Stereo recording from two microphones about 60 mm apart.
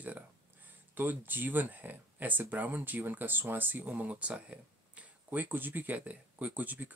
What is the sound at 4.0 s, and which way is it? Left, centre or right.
Speech, right.